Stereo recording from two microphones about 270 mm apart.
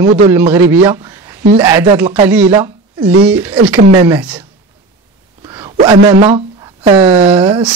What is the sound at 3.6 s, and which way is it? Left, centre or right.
Speech, centre.